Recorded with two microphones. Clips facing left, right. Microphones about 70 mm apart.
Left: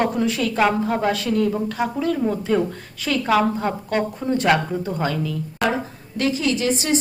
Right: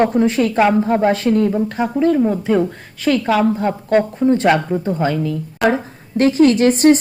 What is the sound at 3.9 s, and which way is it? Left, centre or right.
Speech, right.